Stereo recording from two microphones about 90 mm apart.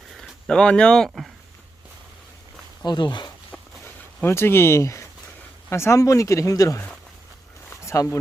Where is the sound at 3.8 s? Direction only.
30° left (ahead or behind).